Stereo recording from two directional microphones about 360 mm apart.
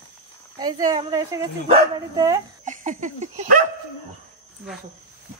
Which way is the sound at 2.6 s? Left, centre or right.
Right.